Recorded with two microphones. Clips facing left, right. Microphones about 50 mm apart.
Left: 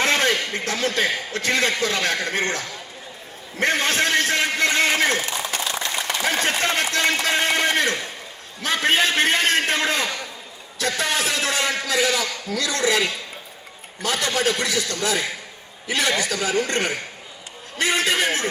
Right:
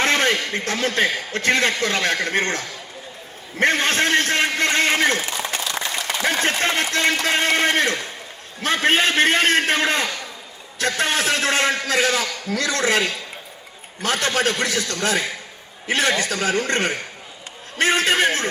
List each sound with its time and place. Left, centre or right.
0.0 s a man's voice: right
5.5 s a sound: centre
6.2 s a man's voice: right